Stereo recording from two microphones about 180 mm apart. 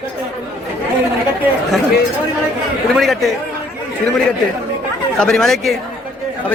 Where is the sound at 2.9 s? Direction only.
Centre (ahead or behind).